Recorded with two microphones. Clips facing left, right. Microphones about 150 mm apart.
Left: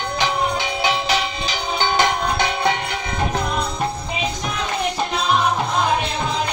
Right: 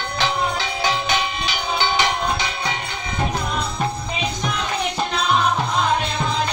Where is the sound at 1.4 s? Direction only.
45° left (ahead or behind).